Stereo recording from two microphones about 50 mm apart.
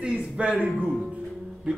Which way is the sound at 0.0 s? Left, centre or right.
Centre.